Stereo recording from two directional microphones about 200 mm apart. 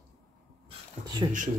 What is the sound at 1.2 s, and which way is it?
Speech, 20° right (ahead or behind).